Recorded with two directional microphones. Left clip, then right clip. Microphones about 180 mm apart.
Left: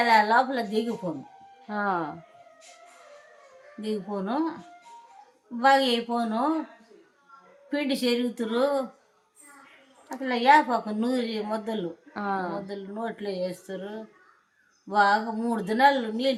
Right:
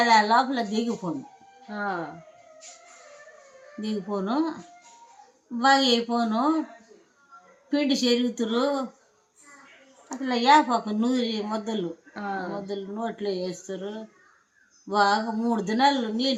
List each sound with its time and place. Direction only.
0.0 s speech: 20° left (ahead or behind)
1.6 s speech: 40° left (ahead or behind)
3.8 s speech: 20° left (ahead or behind)
5.5 s speech: 20° left (ahead or behind)
7.7 s speech: 25° left (ahead or behind)
10.2 s speech: 20° left (ahead or behind)
12.1 s speech: 35° left (ahead or behind)